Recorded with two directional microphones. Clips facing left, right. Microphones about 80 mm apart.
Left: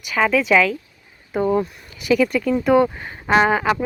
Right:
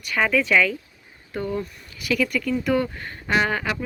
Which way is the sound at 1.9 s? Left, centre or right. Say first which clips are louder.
Left 6 dB; left.